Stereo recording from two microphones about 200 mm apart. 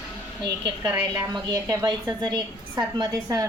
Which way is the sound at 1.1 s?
20° right (ahead or behind).